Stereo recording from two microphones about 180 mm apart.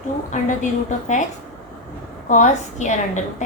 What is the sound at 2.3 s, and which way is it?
Speech, 40° left (ahead or behind).